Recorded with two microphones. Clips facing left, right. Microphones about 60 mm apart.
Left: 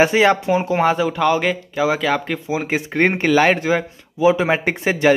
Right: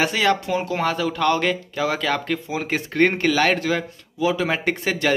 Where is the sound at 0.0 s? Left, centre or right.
Left.